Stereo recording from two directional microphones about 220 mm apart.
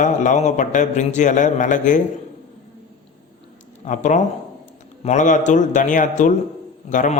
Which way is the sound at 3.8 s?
35° left (ahead or behind).